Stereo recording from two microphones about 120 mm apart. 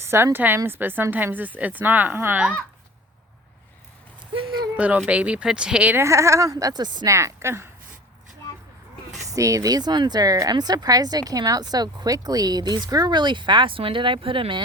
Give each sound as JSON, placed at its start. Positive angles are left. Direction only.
{"t": 0.0, "sound": "a sound", "side_deg": -20}
{"t": 0.3, "sound": "speech", "side_deg": -15}
{"t": 4.4, "sound": "speech", "side_deg": -40}
{"t": 4.8, "sound": "speech", "side_deg": -10}
{"t": 6.1, "sound": "speech", "side_deg": -25}
{"t": 9.2, "sound": "speech", "side_deg": -30}